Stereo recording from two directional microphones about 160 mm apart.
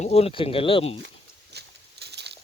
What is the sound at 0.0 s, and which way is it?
Speech, 40° left (ahead or behind).